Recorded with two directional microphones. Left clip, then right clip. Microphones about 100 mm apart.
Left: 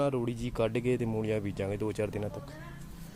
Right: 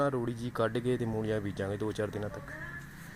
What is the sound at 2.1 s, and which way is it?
Speech, 10° left (ahead or behind).